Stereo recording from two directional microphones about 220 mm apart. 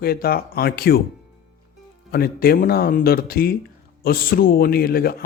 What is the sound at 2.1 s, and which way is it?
Music, 45° left (ahead or behind).